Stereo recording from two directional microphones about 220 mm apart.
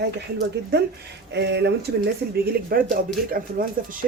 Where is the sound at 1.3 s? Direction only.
50° right (ahead or behind).